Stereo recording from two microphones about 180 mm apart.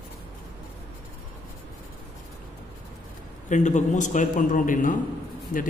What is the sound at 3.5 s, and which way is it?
A man's voice, 40° left (ahead or behind).